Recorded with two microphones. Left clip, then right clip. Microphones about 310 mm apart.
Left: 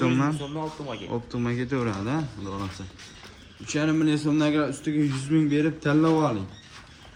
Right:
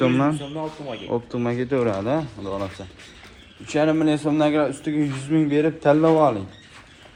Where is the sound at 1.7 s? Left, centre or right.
Centre.